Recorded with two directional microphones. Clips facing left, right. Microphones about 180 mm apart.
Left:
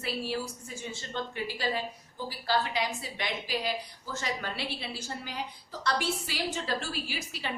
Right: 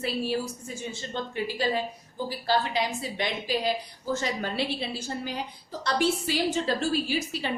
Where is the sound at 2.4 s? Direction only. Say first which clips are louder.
Right 3 dB; 25° right (ahead or behind).